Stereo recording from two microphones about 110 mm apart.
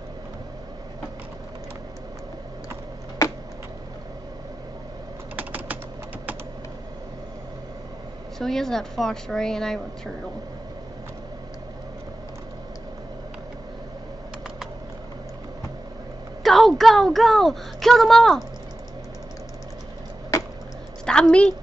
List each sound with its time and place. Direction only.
5.3 s typing: 15° right (ahead or behind)
8.4 s a woman's voice: 5° left (ahead or behind)
16.4 s a woman's voice: centre (ahead or behind)
20.3 s a sound: 30° left (ahead or behind)
21.0 s a woman's voice: 10° left (ahead or behind)